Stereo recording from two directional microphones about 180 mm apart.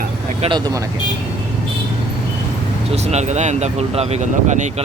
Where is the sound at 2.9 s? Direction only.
40° right (ahead or behind).